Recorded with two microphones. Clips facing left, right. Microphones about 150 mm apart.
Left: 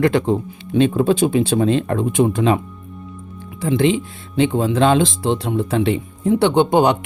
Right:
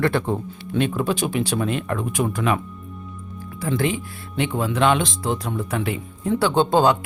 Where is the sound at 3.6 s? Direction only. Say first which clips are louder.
Left 6 dB; 25° left (ahead or behind).